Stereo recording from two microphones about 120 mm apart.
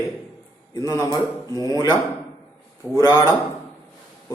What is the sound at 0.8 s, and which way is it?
Speech, 30° left (ahead or behind).